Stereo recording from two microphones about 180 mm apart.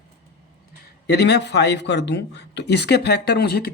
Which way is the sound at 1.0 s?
65° left (ahead or behind).